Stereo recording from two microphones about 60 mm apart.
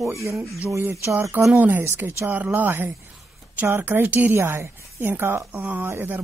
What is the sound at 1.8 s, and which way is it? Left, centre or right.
Speech, right.